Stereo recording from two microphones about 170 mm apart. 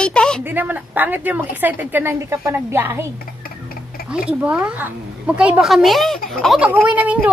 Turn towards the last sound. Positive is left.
turn(degrees=-10)  # may be behind; listen again after turning